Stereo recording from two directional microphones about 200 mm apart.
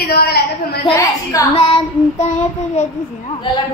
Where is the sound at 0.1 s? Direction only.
50° left (ahead or behind).